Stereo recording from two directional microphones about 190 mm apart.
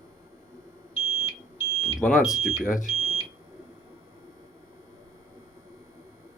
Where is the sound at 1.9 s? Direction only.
Centre (ahead or behind).